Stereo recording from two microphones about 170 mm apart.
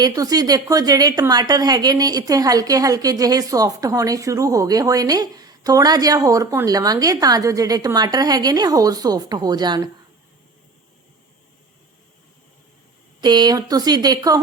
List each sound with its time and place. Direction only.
0.0 s a woman's voice: 20° right (ahead or behind)
13.2 s a woman's voice: 25° right (ahead or behind)